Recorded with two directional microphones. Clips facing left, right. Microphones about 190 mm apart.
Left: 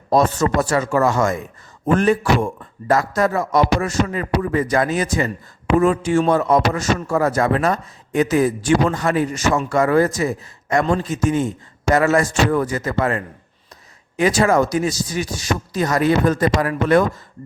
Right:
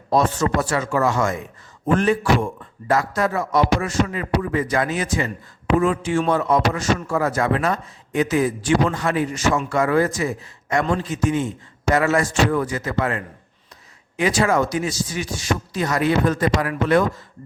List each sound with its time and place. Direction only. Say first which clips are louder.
0.1 s a man's voice: left 2 dB; 45° left (ahead or behind)